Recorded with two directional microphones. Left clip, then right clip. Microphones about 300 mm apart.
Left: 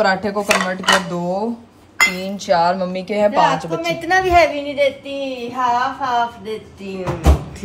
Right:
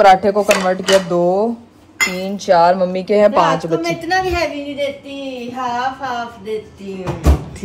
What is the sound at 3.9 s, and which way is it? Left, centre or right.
Speech, centre.